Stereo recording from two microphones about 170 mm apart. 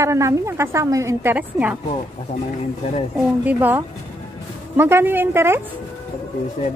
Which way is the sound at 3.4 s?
10° right (ahead or behind).